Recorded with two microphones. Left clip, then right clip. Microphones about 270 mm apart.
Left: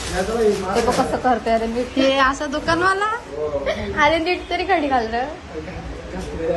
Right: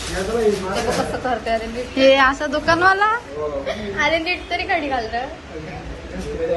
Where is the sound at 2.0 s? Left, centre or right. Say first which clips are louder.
Right 4 dB; centre.